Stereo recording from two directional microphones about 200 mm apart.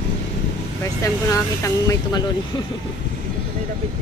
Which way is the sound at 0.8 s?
15° left (ahead or behind).